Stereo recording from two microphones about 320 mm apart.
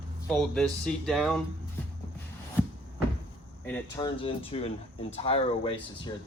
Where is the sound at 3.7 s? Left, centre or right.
Centre.